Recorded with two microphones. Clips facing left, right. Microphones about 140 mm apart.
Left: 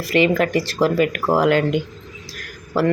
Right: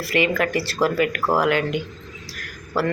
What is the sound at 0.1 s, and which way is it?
Speech, 25° left (ahead or behind).